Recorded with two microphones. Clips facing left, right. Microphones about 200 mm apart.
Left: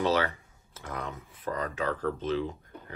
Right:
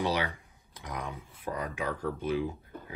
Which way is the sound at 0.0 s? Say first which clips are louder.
Left 4 dB; 15° right (ahead or behind).